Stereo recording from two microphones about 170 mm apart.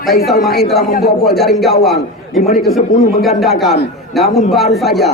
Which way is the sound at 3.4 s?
Centre (ahead or behind).